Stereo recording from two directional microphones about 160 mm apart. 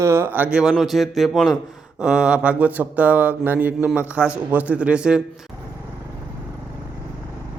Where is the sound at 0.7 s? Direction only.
Centre (ahead or behind).